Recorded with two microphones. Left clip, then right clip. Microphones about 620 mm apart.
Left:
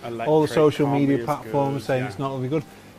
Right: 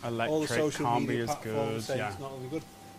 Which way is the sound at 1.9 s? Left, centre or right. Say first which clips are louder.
Left 9 dB; left.